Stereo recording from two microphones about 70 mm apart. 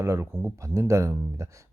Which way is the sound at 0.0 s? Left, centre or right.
Right.